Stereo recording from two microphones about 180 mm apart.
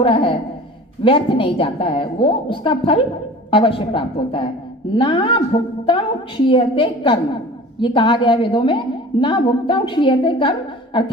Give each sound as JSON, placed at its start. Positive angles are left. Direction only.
{"t": 0.0, "sound": "a woman's voice", "side_deg": 30}